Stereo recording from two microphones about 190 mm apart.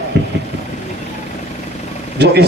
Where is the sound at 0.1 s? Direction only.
65° right (ahead or behind).